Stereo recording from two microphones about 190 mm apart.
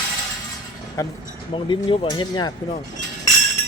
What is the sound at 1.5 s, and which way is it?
Speech, 25° left (ahead or behind).